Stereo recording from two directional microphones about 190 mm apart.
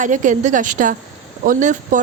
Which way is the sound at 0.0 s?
40° right (ahead or behind).